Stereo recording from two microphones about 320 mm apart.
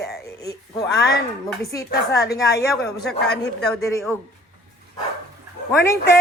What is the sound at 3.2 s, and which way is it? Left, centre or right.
Speech, left.